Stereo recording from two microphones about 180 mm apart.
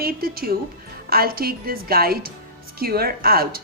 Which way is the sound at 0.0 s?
55° right (ahead or behind).